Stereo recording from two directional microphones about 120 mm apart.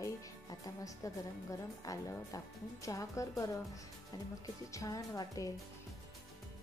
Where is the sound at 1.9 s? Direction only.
30° left (ahead or behind).